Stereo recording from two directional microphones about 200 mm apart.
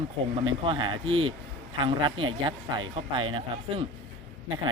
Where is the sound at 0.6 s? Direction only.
25° right (ahead or behind).